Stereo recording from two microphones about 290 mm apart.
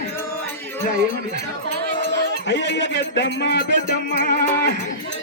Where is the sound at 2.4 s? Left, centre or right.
Left.